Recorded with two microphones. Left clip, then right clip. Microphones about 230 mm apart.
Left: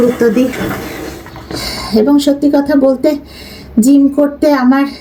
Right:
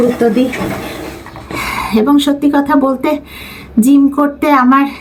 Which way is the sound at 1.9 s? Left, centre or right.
Centre.